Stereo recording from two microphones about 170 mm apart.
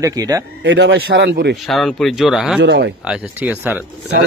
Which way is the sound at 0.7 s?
85° right.